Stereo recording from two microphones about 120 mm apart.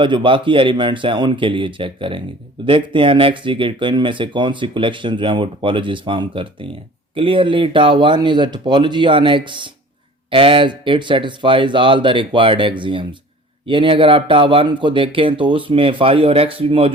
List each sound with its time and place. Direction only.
0.0 s speech: 45° right (ahead or behind)